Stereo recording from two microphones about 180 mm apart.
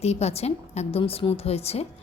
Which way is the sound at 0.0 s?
35° left (ahead or behind).